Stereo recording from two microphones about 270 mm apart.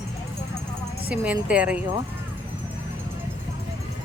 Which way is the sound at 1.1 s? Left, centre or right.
Centre.